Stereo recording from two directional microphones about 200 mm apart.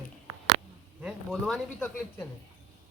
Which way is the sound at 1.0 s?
Centre (ahead or behind).